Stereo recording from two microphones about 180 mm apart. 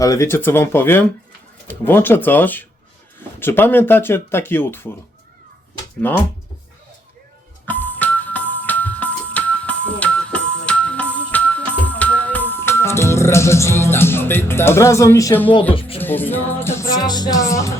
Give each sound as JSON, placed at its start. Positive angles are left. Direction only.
{"t": 0.0, "sound": "music", "side_deg": 15}
{"t": 6.0, "sound": "music", "side_deg": 10}
{"t": 7.7, "sound": "music", "side_deg": 10}